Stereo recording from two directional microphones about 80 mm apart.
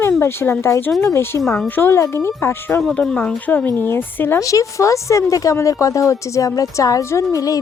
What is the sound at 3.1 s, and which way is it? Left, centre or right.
Speech, left.